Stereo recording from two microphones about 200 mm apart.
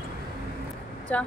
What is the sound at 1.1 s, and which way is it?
Speech, 5° left (ahead or behind).